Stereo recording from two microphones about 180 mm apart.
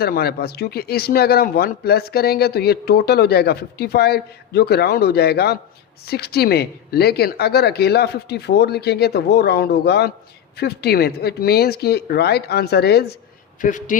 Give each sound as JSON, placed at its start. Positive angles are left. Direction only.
{"t": 0.0, "sound": "a man's voice", "side_deg": 60}
{"t": 13.6, "sound": "a man's voice", "side_deg": 45}